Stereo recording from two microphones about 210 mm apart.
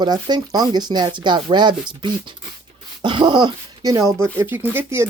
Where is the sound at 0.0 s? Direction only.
20° right (ahead or behind).